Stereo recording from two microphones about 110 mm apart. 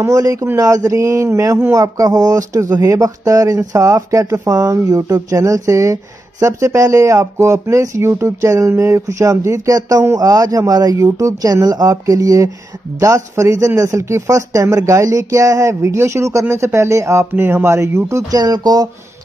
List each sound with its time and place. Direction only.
0.0 s speech: 30° right (ahead or behind)
18.4 s speech: 40° right (ahead or behind)